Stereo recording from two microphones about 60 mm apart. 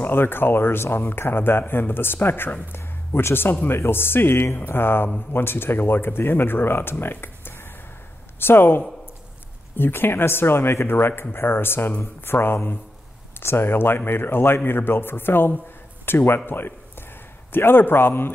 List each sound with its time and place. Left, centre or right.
0.0 s speech: left